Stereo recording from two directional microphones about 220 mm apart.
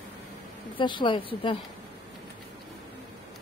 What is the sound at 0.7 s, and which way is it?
Speech, 20° left (ahead or behind).